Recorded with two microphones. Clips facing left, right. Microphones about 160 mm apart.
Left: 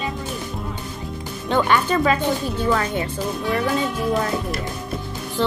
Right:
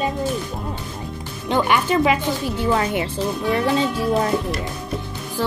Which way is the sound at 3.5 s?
Centre (ahead or behind).